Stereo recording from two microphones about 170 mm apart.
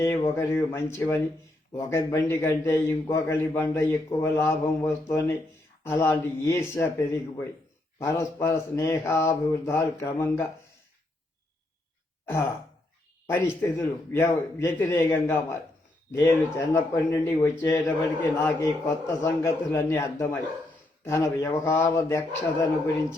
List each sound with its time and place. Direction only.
0.0 s speech: 15° left (ahead or behind)
12.2 s throat clearing: 15° left (ahead or behind)
13.2 s speech: 10° left (ahead or behind)